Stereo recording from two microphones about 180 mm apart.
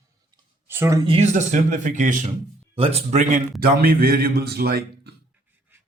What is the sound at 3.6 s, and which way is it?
Speech, 55° right (ahead or behind).